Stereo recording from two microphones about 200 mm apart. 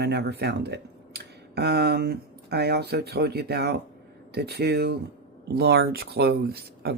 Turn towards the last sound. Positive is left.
turn(degrees=-50)  # may be behind; listen again after turning